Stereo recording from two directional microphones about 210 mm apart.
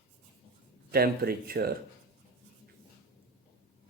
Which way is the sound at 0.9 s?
45° right (ahead or behind).